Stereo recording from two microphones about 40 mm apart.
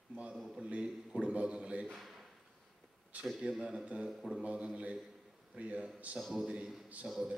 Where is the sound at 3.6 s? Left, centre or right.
Centre.